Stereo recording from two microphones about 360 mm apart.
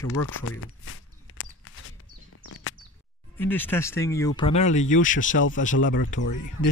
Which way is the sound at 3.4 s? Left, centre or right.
Centre.